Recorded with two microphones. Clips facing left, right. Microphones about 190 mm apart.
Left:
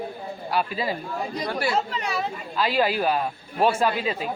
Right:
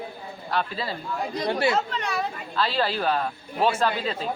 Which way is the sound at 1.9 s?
5° left (ahead or behind).